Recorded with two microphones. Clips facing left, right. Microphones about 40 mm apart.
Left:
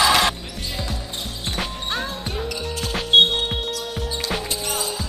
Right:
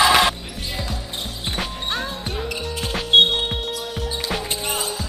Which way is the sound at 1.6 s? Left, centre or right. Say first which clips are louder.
Even; centre.